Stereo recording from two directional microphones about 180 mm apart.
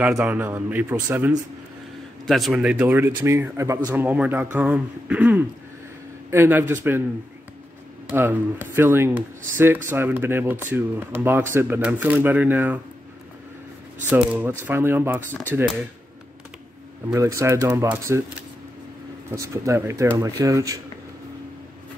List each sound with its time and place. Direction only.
0.0 s speech: 5° right (ahead or behind)
2.2 s speech: centre (ahead or behind)
8.1 s speech: 10° right (ahead or behind)
14.1 s speech: 10° right (ahead or behind)
17.1 s speech: 15° right (ahead or behind)
19.3 s speech: 15° right (ahead or behind)